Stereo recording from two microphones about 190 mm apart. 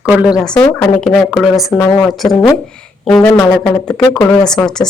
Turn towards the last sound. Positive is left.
turn(degrees=5)  # may be behind; listen again after turning